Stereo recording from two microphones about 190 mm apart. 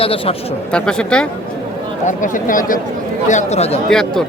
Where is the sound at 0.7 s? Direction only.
5° left (ahead or behind).